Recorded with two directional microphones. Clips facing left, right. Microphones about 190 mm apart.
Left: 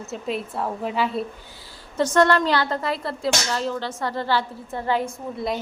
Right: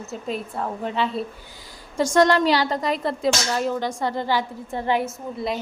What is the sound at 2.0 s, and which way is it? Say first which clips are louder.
A woman's voice: right 1 dB; 10° right (ahead or behind).